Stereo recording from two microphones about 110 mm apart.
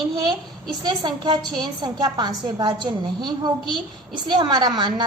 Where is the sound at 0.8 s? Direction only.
40° right (ahead or behind).